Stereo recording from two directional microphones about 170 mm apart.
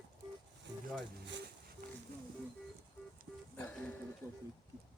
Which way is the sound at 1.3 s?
90° right.